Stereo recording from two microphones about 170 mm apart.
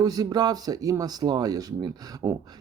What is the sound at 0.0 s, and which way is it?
Speech, 20° right (ahead or behind).